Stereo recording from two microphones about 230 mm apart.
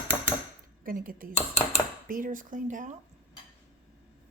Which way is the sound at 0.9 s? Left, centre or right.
Right.